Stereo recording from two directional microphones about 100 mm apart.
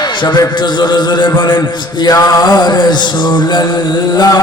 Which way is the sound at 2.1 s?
35° left (ahead or behind).